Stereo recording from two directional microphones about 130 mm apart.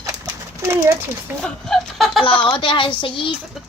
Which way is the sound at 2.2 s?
40° left (ahead or behind).